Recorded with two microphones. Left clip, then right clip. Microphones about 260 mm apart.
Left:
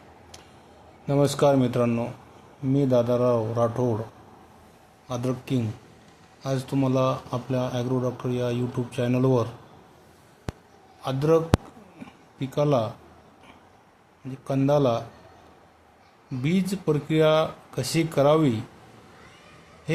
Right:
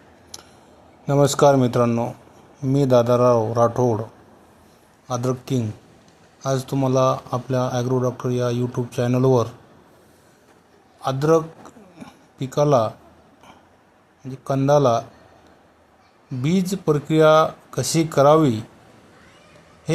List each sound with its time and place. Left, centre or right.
0.3 s a sound: right
1.0 s speech: right
5.0 s speech: centre
11.0 s speech: centre
11.9 s a sound: centre
14.4 s speech: centre
16.4 s speech: centre